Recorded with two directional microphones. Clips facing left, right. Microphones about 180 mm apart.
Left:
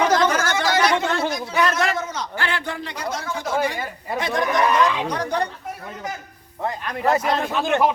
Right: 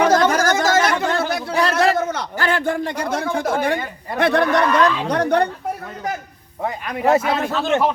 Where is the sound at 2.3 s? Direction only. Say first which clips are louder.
Right 8 dB; 40° right (ahead or behind).